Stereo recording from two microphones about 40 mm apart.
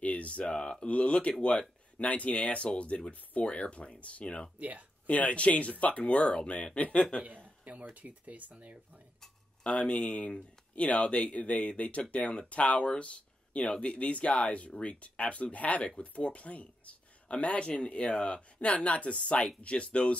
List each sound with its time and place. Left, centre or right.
0.0 s a sound: left
2.0 s speech: left
4.6 s speech: right
5.0 s speech: left
7.9 s speech: right
9.6 s speech: left